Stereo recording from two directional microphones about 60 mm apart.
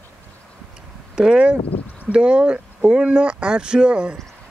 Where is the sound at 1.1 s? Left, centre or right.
Centre.